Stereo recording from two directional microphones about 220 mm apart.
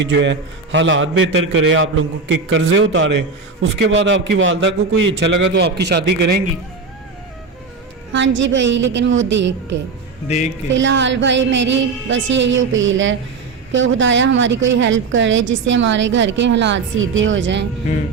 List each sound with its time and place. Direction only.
0.0 s a woman's voice: 55° right (ahead or behind)
8.4 s a woman's voice: 55° right (ahead or behind)